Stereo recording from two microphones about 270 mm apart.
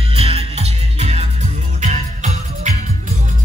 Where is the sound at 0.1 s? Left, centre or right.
Right.